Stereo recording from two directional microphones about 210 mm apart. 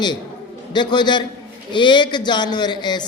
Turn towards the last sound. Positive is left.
turn(degrees=20)  # may be behind; listen again after turning